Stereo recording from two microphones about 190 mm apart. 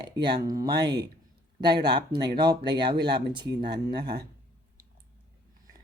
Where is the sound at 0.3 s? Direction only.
20° right (ahead or behind).